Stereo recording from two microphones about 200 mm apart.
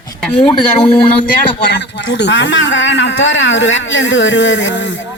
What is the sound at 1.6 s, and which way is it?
Speech, 60° left (ahead or behind).